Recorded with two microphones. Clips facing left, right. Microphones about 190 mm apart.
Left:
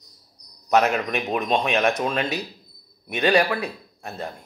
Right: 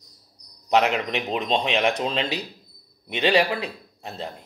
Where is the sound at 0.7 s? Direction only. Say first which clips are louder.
Left 1 dB; 20° right (ahead or behind).